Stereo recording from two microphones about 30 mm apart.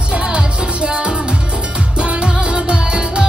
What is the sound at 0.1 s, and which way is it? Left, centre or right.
Music, right.